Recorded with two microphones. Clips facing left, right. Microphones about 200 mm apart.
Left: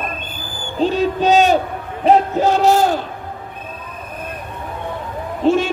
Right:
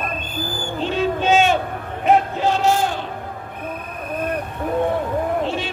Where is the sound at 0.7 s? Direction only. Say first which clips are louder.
Left 5 dB; 40° left (ahead or behind).